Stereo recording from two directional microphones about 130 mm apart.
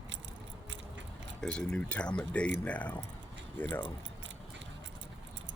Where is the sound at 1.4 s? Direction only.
5° left (ahead or behind).